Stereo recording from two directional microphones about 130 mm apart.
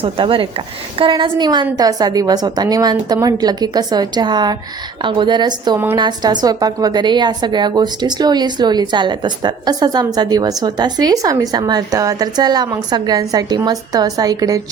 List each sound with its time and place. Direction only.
0.0 s a woman's voice: 45° right (ahead or behind)